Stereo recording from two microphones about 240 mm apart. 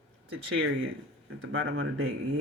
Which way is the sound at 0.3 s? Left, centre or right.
Right.